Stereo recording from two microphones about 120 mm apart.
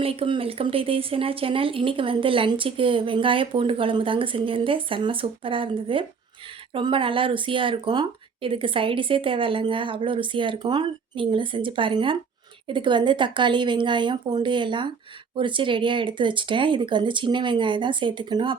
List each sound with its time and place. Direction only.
0.0 s speech: 55° right (ahead or behind)